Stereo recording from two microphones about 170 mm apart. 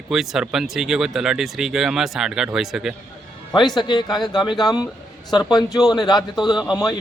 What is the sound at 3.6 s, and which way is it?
A man's voice, 25° left (ahead or behind).